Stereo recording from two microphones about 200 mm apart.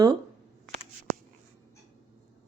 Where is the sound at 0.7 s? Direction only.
40° right (ahead or behind).